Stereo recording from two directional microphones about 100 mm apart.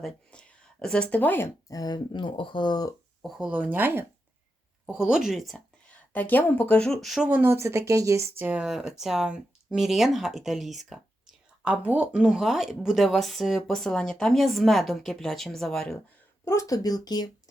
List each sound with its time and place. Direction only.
0.0 s speech: 10° left (ahead or behind)
1.6 s speech: 40° left (ahead or behind)
3.2 s speech: centre (ahead or behind)
3.4 s speech: 15° right (ahead or behind)
4.9 s speech: 5° right (ahead or behind)
5.9 s speech: 15° left (ahead or behind); by 7.3 s centre (ahead or behind)
7.3 s speech: 20° right (ahead or behind)
8.4 s speech: 15° right (ahead or behind)
8.6 s speech: 5° right (ahead or behind)
16.5 s speech: 35° left (ahead or behind)